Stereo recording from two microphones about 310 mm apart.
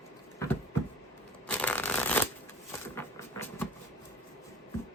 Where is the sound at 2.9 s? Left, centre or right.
Centre.